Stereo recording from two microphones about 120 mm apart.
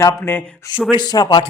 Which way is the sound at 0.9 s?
35° left (ahead or behind).